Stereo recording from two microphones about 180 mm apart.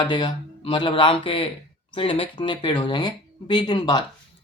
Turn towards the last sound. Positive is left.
turn(degrees=25)  # may be behind; listen again after turning